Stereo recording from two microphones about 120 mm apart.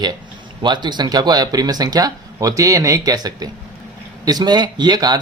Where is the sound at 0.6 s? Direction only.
40° right (ahead or behind).